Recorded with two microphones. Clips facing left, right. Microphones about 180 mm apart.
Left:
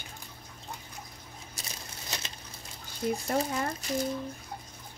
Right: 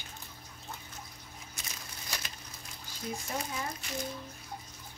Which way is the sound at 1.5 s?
30° left (ahead or behind).